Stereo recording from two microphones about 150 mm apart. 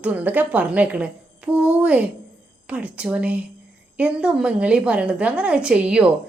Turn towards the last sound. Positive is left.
turn(degrees=-5)  # may be behind; listen again after turning